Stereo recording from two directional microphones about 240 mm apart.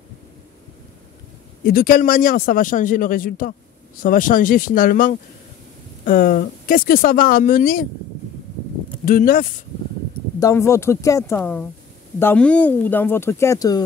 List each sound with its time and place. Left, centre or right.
1.6 s speech: left
9.0 s speech: left
10.4 s speech: centre